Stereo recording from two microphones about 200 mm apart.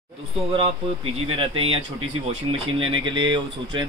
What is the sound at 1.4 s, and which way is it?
Speech, 25° right (ahead or behind).